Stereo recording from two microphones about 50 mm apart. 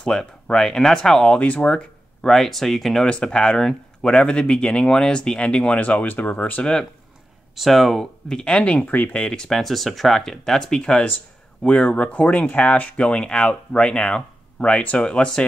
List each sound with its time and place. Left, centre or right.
0.0 s speech: centre
1.5 s speech: left
2.2 s speech: centre
3.1 s speech: centre
5.8 s speech: left
7.5 s speech: centre